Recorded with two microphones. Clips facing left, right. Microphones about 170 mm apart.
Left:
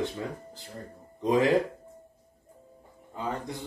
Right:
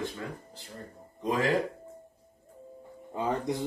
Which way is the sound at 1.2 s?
20° left (ahead or behind).